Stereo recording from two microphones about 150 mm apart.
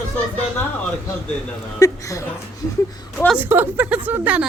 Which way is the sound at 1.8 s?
20° left (ahead or behind).